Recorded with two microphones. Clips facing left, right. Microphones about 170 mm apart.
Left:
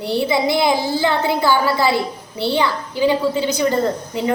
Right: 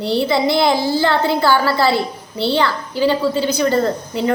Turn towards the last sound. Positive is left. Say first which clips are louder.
# right 1 dB
turn(degrees=15)  # may be behind; listen again after turning